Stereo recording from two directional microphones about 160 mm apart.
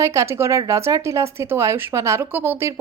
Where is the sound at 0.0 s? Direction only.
20° right (ahead or behind).